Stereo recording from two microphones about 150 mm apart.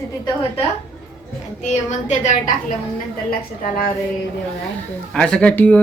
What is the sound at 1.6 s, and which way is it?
Speech, 50° left (ahead or behind).